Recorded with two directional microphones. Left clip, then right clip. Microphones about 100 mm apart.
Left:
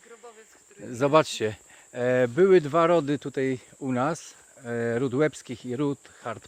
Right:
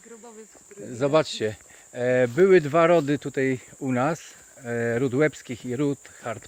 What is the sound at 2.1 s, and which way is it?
Speech, 90° left.